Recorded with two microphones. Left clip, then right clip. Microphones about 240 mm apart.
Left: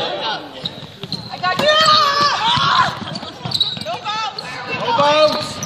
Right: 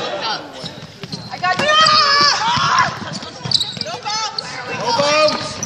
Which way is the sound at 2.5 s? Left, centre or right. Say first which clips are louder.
Left 1 dB; left.